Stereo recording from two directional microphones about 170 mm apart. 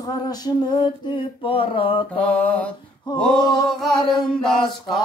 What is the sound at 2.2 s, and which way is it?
Mantra, 10° left (ahead or behind).